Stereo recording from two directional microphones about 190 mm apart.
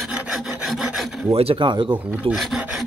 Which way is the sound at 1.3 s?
30° right (ahead or behind).